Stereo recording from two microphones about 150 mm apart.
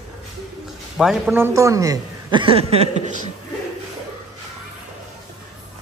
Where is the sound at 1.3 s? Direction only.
15° right (ahead or behind).